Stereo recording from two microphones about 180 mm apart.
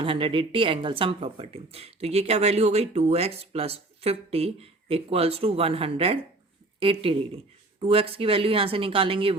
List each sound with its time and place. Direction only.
0.0 s speech: 30° right (ahead or behind)